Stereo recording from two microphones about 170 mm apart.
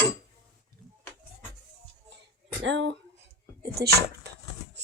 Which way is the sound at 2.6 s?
90° right.